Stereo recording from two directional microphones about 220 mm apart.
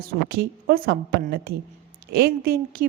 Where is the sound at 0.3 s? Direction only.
45° right (ahead or behind).